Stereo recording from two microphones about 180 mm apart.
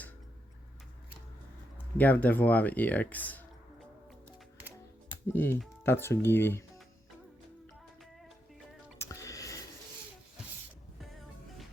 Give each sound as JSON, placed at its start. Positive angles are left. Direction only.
{"t": 2.0, "sound": "speech", "side_deg": 10}
{"t": 5.3, "sound": "speech", "side_deg": 10}
{"t": 9.0, "sound": "a sound", "side_deg": 15}